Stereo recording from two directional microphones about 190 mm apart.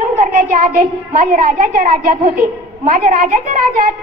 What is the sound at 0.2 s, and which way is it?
A child's voice, 45° right (ahead or behind).